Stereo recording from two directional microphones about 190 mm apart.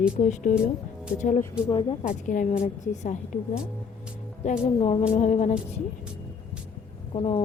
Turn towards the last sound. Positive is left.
turn(degrees=30)  # may be behind; listen again after turning